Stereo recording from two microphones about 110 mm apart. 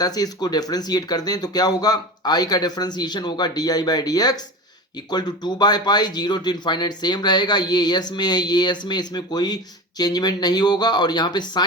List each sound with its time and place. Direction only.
0.0 s speech: 35° left (ahead or behind)